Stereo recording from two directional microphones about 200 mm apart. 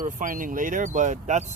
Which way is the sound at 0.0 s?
40° right (ahead or behind).